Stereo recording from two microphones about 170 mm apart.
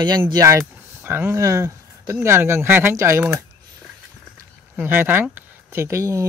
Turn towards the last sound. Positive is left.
turn(degrees=-20)  # may be behind; listen again after turning